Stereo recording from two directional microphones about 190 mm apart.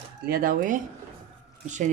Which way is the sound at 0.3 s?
50° right (ahead or behind).